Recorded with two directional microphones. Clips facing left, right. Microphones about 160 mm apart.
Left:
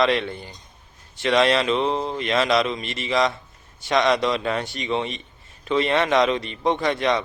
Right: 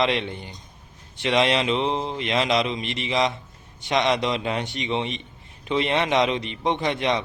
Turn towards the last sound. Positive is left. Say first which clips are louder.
# left 2 dB
turn(degrees=-20)  # may be behind; listen again after turning